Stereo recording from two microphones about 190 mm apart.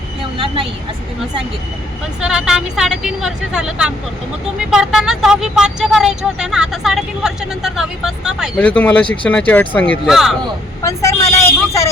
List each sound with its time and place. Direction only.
0.3 s vehicle: 30° right (ahead or behind)
2.2 s speech: 5° right (ahead or behind)
8.5 s speech: 10° left (ahead or behind)
10.8 s speech: 15° left (ahead or behind)